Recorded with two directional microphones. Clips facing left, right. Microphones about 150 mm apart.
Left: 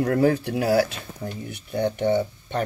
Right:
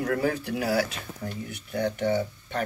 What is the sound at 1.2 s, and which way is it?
Speech, 25° left (ahead or behind).